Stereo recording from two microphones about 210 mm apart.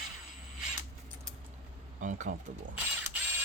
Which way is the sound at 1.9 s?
35° right (ahead or behind).